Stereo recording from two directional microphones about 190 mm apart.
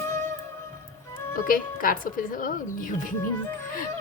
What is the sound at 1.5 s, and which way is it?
A woman's voice, 50° left (ahead or behind).